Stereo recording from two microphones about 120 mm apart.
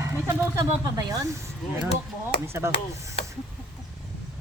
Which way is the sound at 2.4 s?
20° right (ahead or behind).